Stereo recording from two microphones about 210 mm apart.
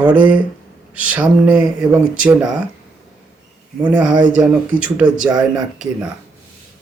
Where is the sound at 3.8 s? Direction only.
5° right (ahead or behind).